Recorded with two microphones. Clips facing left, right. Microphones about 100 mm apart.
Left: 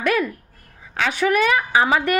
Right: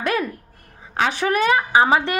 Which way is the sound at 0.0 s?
30° right (ahead or behind).